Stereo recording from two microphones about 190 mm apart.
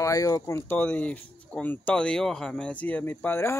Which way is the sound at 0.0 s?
15° left (ahead or behind).